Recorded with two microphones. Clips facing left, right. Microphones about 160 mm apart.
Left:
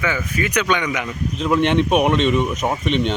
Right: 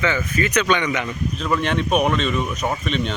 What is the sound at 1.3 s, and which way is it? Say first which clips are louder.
A man's voice: left 6 dB; 20° left (ahead or behind).